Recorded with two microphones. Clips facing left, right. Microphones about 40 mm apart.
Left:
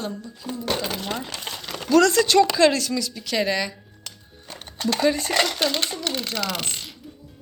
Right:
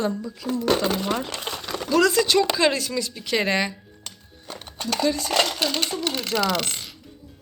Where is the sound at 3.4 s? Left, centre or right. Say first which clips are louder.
Right 2 dB; right.